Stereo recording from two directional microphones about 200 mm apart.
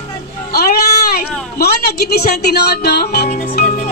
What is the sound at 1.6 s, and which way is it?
Speech, 55° left (ahead or behind).